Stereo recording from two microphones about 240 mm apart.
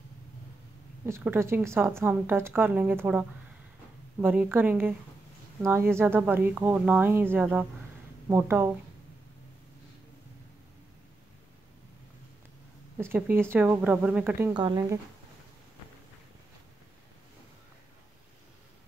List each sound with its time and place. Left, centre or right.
1.0 s a woman's voice: centre
12.9 s a woman's voice: centre
14.5 s speech: centre